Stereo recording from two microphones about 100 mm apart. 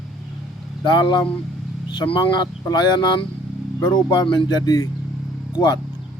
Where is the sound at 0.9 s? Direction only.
50° left (ahead or behind).